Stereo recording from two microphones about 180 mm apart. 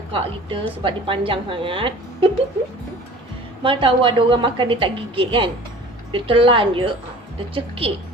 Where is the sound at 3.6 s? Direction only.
30° right (ahead or behind).